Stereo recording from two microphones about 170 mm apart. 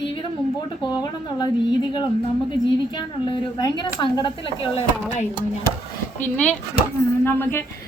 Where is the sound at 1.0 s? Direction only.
25° left (ahead or behind).